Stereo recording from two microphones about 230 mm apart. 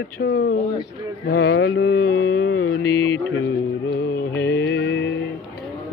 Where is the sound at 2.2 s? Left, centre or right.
Left.